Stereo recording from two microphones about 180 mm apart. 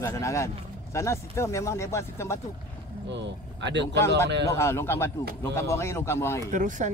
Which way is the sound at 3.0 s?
75° right (ahead or behind).